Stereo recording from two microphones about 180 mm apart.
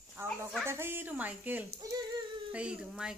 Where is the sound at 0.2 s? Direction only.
15° right (ahead or behind).